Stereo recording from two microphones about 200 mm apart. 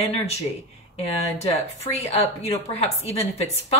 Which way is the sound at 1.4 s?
30° left (ahead or behind).